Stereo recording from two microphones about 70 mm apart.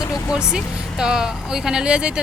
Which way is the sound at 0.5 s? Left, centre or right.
Centre.